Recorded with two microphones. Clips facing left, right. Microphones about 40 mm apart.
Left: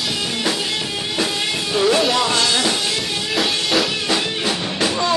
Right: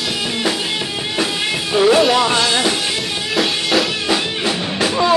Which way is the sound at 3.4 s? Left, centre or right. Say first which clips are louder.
Right 2 dB; centre.